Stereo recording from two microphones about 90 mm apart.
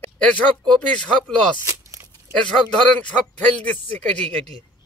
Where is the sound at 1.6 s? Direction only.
35° right (ahead or behind).